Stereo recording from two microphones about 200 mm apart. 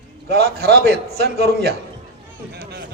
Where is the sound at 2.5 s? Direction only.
55° right (ahead or behind).